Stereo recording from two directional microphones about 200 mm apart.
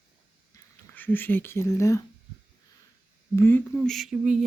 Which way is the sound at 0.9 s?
10° left (ahead or behind).